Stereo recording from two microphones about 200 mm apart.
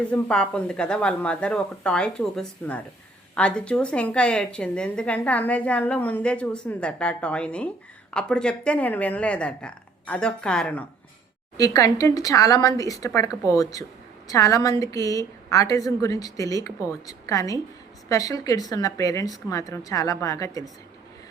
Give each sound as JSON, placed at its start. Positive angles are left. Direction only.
{"t": 0.1, "sound": "a woman's voice", "side_deg": 5}
{"t": 11.5, "sound": "speech", "side_deg": 15}